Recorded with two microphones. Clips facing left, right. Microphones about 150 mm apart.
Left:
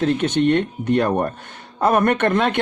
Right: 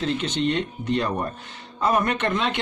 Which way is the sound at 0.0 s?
55° left (ahead or behind).